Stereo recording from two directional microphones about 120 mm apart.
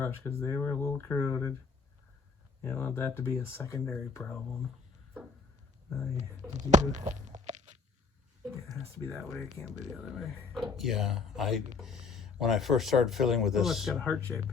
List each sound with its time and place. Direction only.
0.0 s speech: 20° left (ahead or behind)
2.6 s speech: 20° left (ahead or behind)
6.7 s a sound: 90° right
9.1 s speech: centre (ahead or behind)
9.6 s speech: 90° right
10.2 s speech: centre (ahead or behind)
14.1 s speech: 10° left (ahead or behind)